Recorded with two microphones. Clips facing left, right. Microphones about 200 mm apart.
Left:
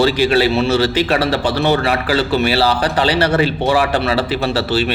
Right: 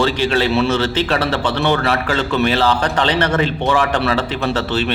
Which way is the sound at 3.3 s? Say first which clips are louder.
Left 2 dB; 10° left (ahead or behind).